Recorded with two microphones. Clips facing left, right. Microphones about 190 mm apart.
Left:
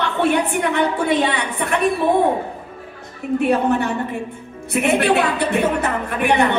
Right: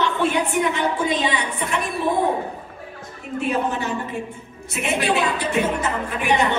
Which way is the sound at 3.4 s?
60° left (ahead or behind).